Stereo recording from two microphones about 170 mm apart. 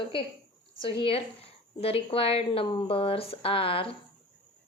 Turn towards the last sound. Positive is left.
turn(degrees=35)  # may be behind; listen again after turning